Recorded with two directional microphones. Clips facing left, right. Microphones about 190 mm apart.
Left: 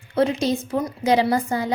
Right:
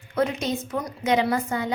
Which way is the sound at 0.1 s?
30° left (ahead or behind).